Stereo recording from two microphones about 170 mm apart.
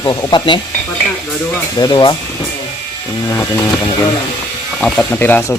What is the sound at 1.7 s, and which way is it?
Speech, 25° left (ahead or behind).